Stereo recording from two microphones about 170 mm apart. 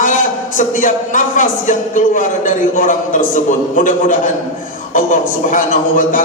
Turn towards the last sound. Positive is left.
turn(degrees=50)  # may be behind; listen again after turning